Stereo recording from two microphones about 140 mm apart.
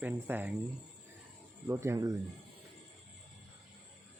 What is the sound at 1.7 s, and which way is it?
Speech, 20° right (ahead or behind).